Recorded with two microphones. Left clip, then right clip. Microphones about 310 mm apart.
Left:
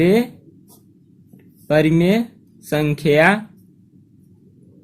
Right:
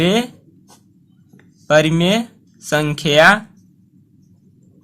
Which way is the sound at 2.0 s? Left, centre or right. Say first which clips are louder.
Right 1 dB; right.